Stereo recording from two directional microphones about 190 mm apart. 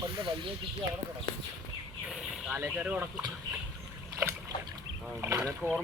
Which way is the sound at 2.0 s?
5° right (ahead or behind).